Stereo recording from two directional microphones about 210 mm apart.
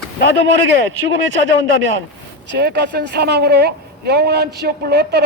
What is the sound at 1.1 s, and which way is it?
Speech, 60° right (ahead or behind).